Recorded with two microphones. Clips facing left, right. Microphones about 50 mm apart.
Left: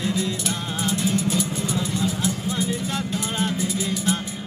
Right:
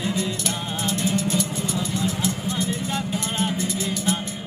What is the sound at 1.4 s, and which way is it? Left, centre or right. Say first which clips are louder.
Music: left 1 dB; centre.